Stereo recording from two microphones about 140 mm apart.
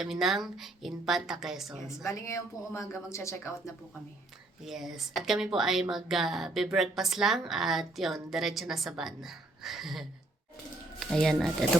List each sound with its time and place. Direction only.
0.0 s a woman's voice: 5° right (ahead or behind)
2.0 s speech: 20° left (ahead or behind)
4.6 s a woman's voice: centre (ahead or behind)
11.1 s a woman's voice: centre (ahead or behind)